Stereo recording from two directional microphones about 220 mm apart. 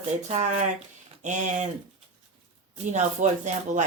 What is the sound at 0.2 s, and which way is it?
Speech, 30° right (ahead or behind).